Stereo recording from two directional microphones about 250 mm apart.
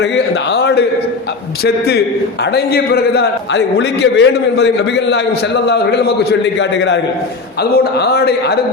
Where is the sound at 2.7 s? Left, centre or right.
Left.